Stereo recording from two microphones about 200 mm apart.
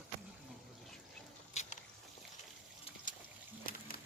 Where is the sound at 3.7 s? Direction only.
45° left (ahead or behind).